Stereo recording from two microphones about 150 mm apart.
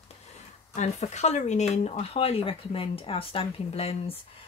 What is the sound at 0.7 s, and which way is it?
Speech, 50° left (ahead or behind).